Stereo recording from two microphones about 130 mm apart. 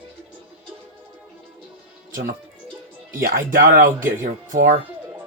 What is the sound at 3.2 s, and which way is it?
Speech, 90° right.